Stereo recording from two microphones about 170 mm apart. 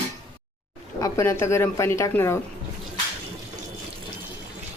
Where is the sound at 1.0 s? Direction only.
15° left (ahead or behind).